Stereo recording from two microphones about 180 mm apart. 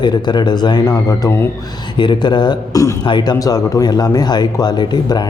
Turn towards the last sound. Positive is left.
turn(degrees=25)  # may be behind; listen again after turning